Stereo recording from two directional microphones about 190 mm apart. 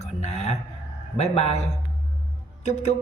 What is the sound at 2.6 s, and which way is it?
Speech, 40° left (ahead or behind).